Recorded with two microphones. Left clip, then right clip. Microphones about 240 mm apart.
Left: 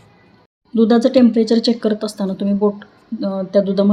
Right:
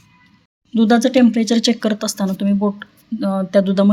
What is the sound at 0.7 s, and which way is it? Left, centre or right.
Speech, right.